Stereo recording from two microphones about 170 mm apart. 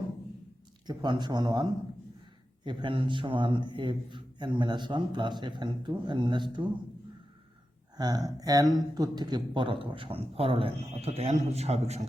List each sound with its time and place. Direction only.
0.9 s speech: 25° right (ahead or behind)
2.6 s a man's voice: 30° right (ahead or behind)
7.9 s a man's voice: 25° right (ahead or behind); by 12.0 s 40° right (ahead or behind)